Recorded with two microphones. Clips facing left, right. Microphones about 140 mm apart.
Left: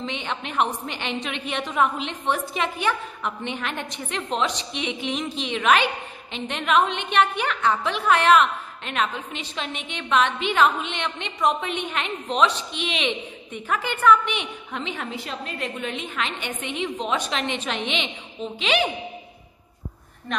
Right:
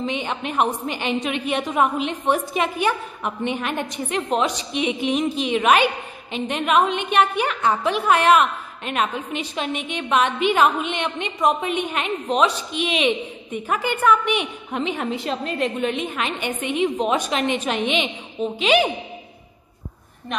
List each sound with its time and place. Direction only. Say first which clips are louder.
0.0 s a woman's voice: right 5 dB; 10° right (ahead or behind)
16.2 s a woman's voice: right 4 dB; 10° right (ahead or behind)